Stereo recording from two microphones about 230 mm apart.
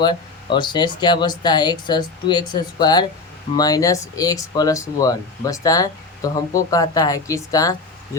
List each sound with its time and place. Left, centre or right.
0.0 s speech: centre